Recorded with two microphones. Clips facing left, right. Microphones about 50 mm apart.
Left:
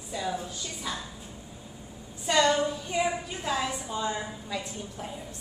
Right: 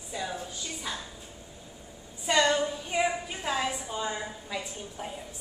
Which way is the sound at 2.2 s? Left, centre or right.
Centre.